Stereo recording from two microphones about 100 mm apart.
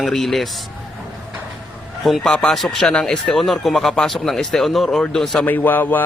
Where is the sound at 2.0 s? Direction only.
5° left (ahead or behind).